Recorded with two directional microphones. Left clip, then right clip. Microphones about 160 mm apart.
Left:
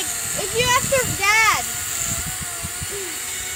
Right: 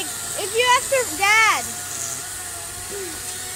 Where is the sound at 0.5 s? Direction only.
75° right (ahead or behind).